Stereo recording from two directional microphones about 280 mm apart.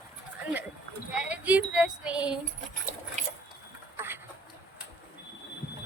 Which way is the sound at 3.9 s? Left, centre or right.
Centre.